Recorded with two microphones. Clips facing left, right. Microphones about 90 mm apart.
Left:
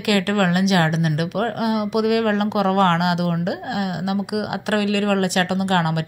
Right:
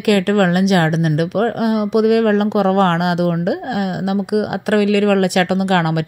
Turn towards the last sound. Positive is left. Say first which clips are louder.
# right 5 dB
turn(degrees=-55)  # may be behind; listen again after turning